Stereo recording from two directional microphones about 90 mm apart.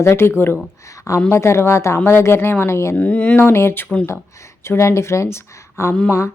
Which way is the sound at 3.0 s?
15° left (ahead or behind).